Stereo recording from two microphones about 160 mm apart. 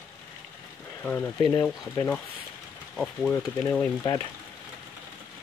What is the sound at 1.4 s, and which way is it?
Speech, 25° left (ahead or behind).